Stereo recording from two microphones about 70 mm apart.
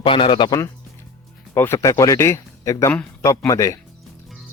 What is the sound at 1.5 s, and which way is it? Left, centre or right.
Speech, left.